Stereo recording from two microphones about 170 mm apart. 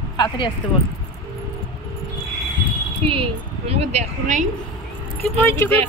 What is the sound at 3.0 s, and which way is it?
A woman's voice, 35° right (ahead or behind).